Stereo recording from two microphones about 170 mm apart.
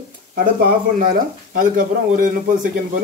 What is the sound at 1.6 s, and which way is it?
Speech, 50° right (ahead or behind).